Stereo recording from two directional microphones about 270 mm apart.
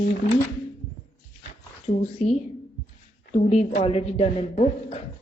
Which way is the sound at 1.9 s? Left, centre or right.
Left.